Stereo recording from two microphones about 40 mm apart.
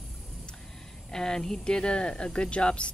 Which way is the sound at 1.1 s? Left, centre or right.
Centre.